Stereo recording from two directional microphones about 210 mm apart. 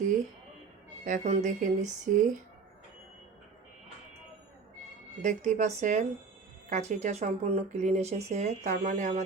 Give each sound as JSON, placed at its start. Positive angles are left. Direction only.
{"t": 1.0, "sound": "speech", "side_deg": -35}
{"t": 5.2, "sound": "speech", "side_deg": -35}